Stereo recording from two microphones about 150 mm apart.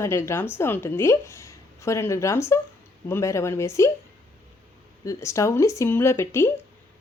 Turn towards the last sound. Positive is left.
turn(degrees=15)  # may be behind; listen again after turning